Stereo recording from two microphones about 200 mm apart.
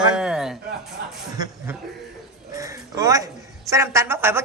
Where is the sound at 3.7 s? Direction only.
15° right (ahead or behind).